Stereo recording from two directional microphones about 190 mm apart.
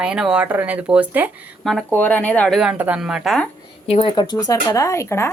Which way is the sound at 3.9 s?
25° left (ahead or behind).